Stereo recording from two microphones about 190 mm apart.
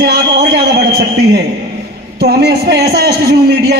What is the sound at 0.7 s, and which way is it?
A man's voice, 60° right (ahead or behind).